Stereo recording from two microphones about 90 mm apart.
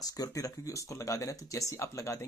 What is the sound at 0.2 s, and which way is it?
Speech, 40° left (ahead or behind).